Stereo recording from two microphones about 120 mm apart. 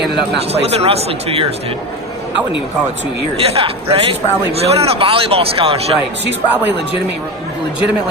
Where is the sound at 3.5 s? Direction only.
55° right (ahead or behind).